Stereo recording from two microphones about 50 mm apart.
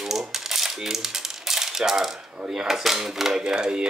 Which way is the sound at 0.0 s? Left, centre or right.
Centre.